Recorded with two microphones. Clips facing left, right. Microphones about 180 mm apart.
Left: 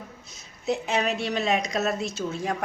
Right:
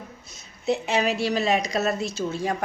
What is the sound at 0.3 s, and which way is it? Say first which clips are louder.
A woman's voice: right 2 dB; centre (ahead or behind).